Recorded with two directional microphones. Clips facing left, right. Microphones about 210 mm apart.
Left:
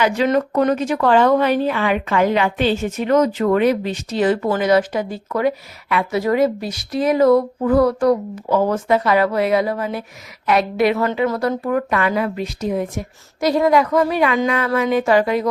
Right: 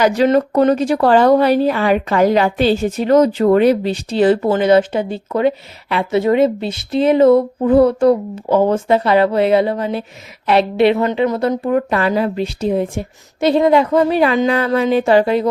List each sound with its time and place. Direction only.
0.0 s speech: 35° right (ahead or behind)